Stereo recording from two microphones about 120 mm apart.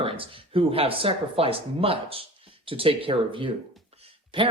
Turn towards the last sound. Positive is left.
turn(degrees=-45)  # may be behind; listen again after turning